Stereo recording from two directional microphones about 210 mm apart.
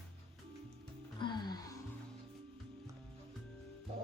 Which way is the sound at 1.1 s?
20° left (ahead or behind).